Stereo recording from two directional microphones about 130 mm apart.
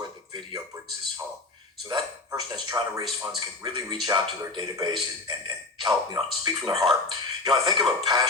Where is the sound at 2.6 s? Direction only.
30° right (ahead or behind).